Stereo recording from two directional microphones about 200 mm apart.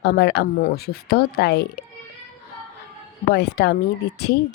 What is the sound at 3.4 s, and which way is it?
Speech, 55° left (ahead or behind).